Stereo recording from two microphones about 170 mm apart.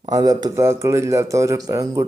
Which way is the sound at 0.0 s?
20° right (ahead or behind).